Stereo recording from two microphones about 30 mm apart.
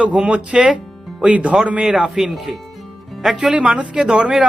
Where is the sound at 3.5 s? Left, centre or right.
Right.